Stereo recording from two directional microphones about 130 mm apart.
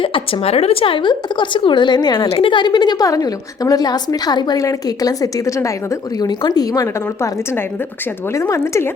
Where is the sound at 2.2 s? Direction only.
45° left (ahead or behind).